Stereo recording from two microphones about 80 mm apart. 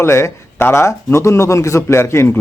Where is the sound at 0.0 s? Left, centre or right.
Left.